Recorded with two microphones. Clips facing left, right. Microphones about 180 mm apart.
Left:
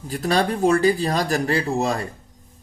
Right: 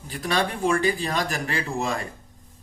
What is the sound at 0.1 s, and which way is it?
Speech, 40° left (ahead or behind).